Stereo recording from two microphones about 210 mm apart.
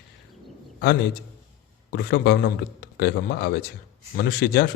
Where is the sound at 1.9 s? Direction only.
50° left (ahead or behind).